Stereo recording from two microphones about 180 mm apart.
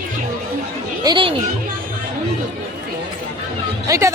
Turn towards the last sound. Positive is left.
turn(degrees=-15)  # may be behind; listen again after turning